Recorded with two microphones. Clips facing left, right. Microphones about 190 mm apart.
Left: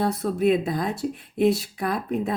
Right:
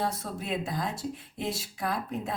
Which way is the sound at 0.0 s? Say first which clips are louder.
Left 11 dB; 60° left (ahead or behind).